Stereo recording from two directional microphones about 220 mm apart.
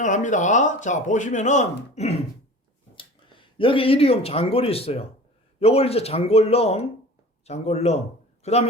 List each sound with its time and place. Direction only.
0.0 s speech: 35° left (ahead or behind)